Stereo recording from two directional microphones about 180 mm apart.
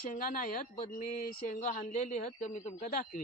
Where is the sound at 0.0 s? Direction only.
50° left (ahead or behind).